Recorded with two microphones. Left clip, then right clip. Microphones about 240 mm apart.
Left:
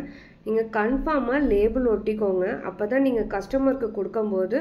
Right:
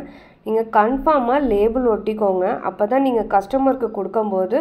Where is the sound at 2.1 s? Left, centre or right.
Right.